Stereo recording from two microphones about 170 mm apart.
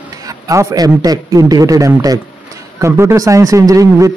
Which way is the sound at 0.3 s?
20° right (ahead or behind).